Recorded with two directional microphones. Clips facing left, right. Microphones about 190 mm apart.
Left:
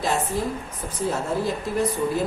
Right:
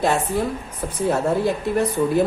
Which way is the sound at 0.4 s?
65° right (ahead or behind).